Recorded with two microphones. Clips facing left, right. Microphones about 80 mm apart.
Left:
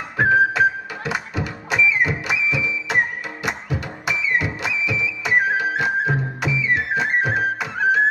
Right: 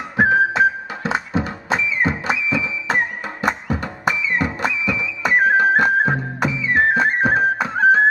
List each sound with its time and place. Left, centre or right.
0.2 s music: right